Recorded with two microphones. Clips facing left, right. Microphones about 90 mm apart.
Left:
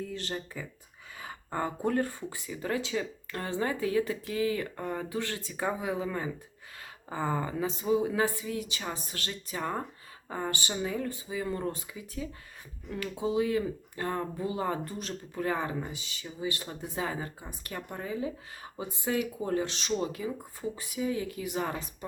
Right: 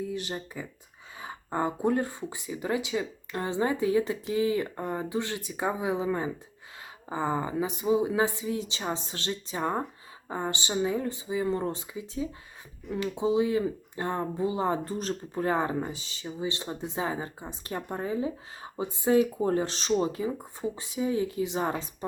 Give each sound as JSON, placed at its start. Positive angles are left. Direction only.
{"t": 0.0, "sound": "speech", "side_deg": -15}